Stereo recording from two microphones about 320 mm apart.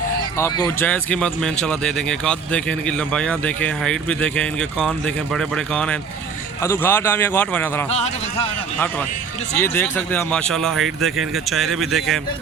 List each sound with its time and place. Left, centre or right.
0.3 s speech: centre
7.9 s a man's voice: centre
9.6 s speech: centre